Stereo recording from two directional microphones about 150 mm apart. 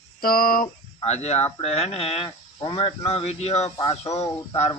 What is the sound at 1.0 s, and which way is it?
A man's voice, 45° left (ahead or behind).